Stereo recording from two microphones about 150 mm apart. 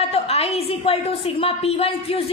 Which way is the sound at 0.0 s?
40° left (ahead or behind).